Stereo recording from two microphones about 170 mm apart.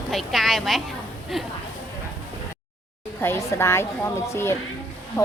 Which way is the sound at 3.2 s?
15° left (ahead or behind).